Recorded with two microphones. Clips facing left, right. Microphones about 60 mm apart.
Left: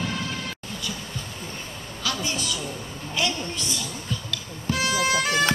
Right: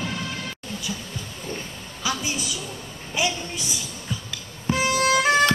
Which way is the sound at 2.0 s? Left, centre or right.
Centre.